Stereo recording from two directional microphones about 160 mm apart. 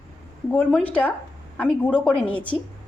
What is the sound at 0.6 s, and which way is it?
A woman's voice, 5° left (ahead or behind).